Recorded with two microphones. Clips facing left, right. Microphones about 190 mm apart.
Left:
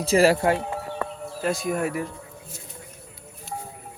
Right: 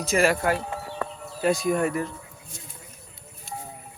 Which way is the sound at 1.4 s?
Centre (ahead or behind).